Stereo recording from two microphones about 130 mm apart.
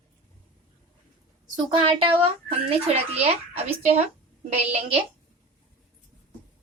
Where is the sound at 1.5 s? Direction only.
40° right (ahead or behind).